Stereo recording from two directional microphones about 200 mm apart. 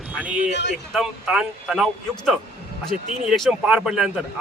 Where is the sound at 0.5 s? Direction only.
60° left (ahead or behind).